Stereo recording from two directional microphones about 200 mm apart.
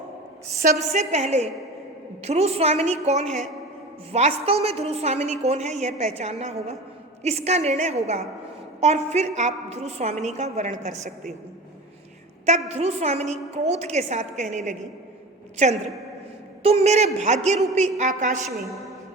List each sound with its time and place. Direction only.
0.9 s a woman's voice: 35° right (ahead or behind)
12.5 s a woman's voice: 35° right (ahead or behind)
18.4 s a woman's voice: centre (ahead or behind)